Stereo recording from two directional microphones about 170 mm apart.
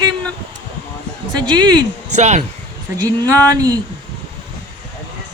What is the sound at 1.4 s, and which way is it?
Speech, 25° right (ahead or behind).